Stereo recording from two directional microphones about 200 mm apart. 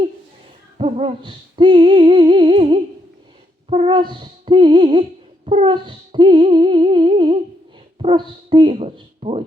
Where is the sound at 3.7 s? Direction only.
25° right (ahead or behind).